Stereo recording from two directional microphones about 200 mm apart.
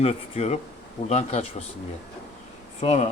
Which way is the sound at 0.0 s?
30° left (ahead or behind).